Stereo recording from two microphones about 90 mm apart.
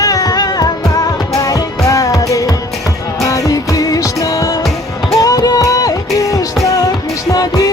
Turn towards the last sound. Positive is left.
turn(degrees=40)  # may be behind; listen again after turning